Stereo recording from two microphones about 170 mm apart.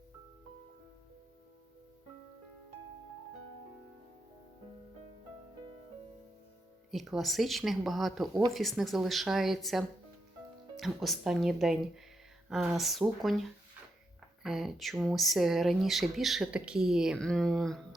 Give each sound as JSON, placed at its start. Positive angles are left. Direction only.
{"t": 6.9, "sound": "speech", "side_deg": 0}